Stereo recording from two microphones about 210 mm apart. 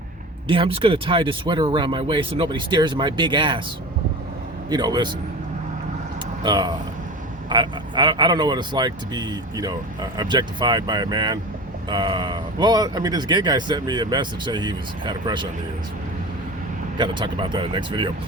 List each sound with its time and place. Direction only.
0.4 s speech: 25° right (ahead or behind)
4.7 s speech: 20° right (ahead or behind)
6.4 s speech: 20° right (ahead or behind)
17.0 s speech: 20° right (ahead or behind)